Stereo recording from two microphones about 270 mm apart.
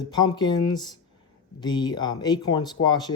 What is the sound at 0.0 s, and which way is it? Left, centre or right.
Speech, centre.